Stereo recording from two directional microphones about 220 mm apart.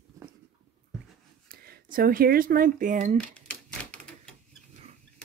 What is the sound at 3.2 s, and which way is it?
Typewriter, 5° left (ahead or behind).